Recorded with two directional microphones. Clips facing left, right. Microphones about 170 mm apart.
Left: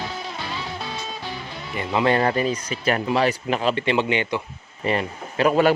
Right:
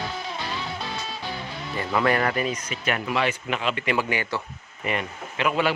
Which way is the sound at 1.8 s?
20° left (ahead or behind).